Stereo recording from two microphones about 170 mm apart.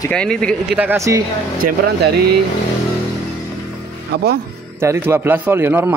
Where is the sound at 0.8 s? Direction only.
15° right (ahead or behind).